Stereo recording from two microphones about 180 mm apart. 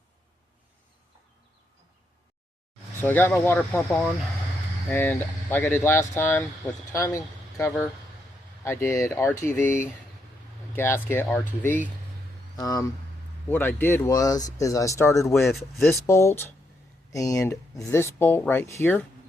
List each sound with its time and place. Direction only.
3.0 s speech: 10° left (ahead or behind)
4.9 s speech: 10° left (ahead or behind)
8.6 s speech: 15° left (ahead or behind)
15.4 s speech: centre (ahead or behind)
15.9 s speech: 15° left (ahead or behind)